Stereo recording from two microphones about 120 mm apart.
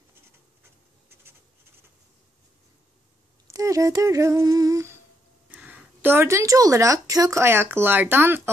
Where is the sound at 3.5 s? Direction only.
25° right (ahead or behind).